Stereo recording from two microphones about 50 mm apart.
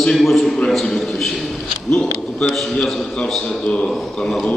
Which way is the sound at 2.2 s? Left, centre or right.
Centre.